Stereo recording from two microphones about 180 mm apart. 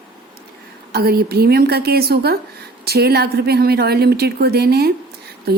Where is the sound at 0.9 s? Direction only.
60° right (ahead or behind).